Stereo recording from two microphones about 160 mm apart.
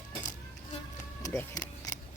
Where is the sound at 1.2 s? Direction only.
20° left (ahead or behind).